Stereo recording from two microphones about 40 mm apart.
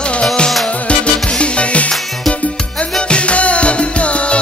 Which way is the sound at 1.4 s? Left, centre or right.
Left.